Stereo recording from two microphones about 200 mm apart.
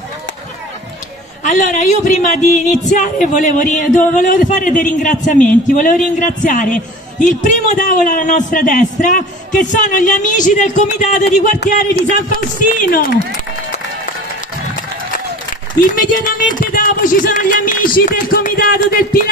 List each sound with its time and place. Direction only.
1.4 s a man's voice: 40° left (ahead or behind)
15.8 s speech: 40° left (ahead or behind)